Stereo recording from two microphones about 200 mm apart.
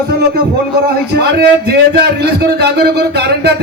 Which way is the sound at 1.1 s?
55° right (ahead or behind).